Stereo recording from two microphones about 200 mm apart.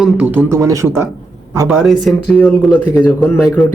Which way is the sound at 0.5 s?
15° right (ahead or behind).